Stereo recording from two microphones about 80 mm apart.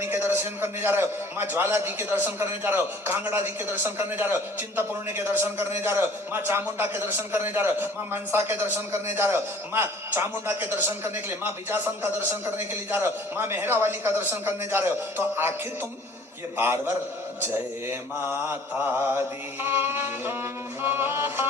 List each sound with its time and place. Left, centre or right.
0.0 s a man's voice: right
16.6 s a man's voice: right